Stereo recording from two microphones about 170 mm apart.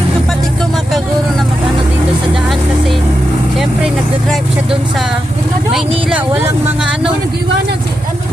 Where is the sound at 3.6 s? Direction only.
Centre (ahead or behind).